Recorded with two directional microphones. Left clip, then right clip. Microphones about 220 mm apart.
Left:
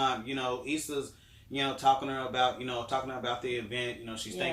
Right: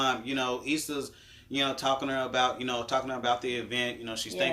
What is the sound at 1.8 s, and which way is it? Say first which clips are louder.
Speech: left 1 dB; 45° right (ahead or behind).